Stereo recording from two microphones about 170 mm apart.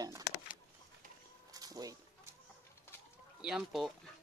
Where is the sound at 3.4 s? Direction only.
5° right (ahead or behind).